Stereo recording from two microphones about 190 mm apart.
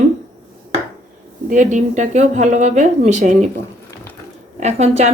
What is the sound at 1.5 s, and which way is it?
Speech, 40° right (ahead or behind).